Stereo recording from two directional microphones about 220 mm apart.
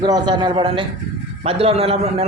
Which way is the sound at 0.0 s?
20° right (ahead or behind).